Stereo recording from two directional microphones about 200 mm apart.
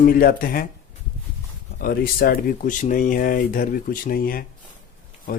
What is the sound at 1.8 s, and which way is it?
Speech, 50° left (ahead or behind).